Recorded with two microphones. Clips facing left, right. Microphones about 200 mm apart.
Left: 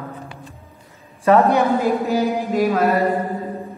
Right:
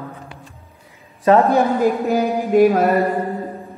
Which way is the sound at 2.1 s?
45° right (ahead or behind).